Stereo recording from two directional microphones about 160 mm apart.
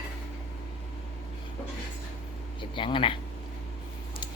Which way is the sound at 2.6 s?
30° left (ahead or behind).